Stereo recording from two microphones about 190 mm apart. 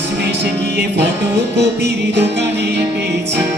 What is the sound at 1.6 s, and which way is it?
Music, 65° right (ahead or behind).